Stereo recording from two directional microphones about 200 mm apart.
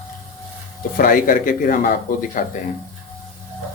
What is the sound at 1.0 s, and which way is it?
Speech, 45° left (ahead or behind).